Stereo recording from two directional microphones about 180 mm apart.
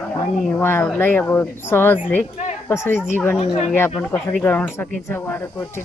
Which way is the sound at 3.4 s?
35° left (ahead or behind).